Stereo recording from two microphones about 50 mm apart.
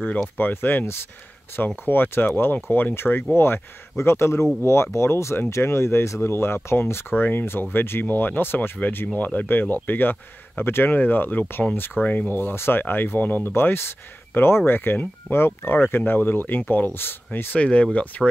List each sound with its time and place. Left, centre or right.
0.4 s speech: left
15.3 s speech: left
17.5 s speech: left